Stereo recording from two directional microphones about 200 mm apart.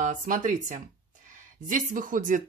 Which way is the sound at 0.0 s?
40° right (ahead or behind).